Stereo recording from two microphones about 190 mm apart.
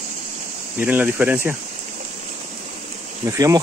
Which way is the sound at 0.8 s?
10° right (ahead or behind).